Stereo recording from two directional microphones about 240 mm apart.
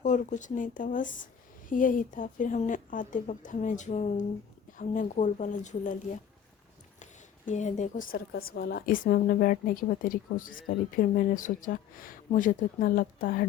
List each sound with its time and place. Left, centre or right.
0.0 s a woman's voice: left
7.0 s a woman's voice: left